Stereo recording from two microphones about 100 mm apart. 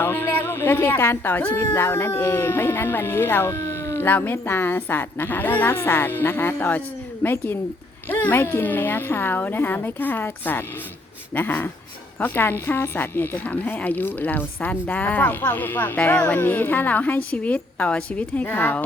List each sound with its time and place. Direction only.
0.0 s speech: 20° left (ahead or behind)